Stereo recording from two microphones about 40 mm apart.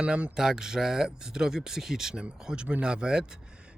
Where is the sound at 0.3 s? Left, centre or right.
Centre.